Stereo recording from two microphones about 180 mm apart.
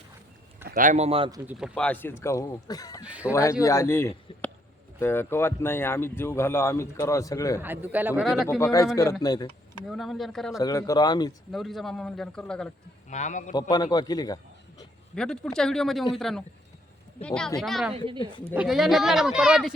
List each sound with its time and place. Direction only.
0.7 s speech: 45° right (ahead or behind)
1.5 s speech: 5° right (ahead or behind); by 3.0 s 20° left (ahead or behind)
3.0 s speech: 5° right (ahead or behind)
3.6 s speech: 15° left (ahead or behind)
7.6 s speech: 10° right (ahead or behind)
8.4 s a man's voice: 15° left (ahead or behind)
9.8 s a man's voice: centre (ahead or behind)
10.6 s a man's voice: 20° left (ahead or behind)
11.5 s a man's voice: centre (ahead or behind)
13.1 s a man's voice: 40° left (ahead or behind)
13.5 s a man's voice: 20° left (ahead or behind)
15.1 s a man's voice: 5° left (ahead or behind)
17.9 s speech: 30° right (ahead or behind)
18.5 s a man's voice: 5° right (ahead or behind)